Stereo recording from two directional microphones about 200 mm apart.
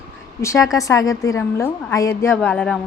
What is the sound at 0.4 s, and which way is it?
A woman's voice, 15° left (ahead or behind).